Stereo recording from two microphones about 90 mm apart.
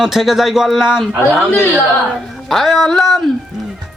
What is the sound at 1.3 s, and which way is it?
Speech, 20° left (ahead or behind).